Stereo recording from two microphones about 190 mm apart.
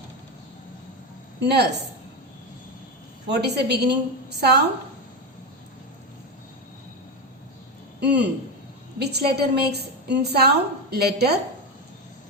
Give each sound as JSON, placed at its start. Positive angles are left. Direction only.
{"t": 1.4, "sound": "a woman's voice", "side_deg": -60}
{"t": 3.2, "sound": "a woman's voice", "side_deg": -60}
{"t": 8.0, "sound": "a woman's voice", "side_deg": -60}